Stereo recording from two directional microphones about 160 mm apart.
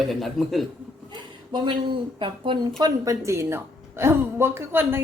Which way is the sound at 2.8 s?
20° right (ahead or behind).